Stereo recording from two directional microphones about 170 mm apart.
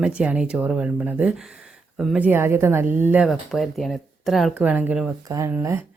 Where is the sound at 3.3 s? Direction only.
Centre (ahead or behind).